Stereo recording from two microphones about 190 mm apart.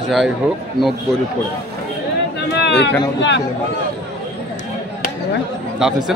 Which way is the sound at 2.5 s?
60° left (ahead or behind).